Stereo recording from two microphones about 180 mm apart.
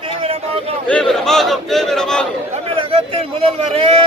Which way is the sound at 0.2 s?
35° right (ahead or behind).